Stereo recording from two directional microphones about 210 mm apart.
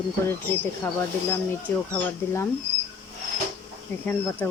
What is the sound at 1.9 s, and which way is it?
Speech, 15° left (ahead or behind).